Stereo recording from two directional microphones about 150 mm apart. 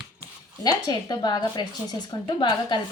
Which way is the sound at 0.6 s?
25° left (ahead or behind).